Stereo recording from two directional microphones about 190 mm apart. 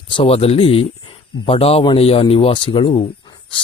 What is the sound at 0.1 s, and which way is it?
Speech, 30° left (ahead or behind).